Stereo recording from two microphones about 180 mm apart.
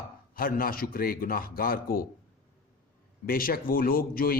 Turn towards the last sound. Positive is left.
turn(degrees=55)  # may be behind; listen again after turning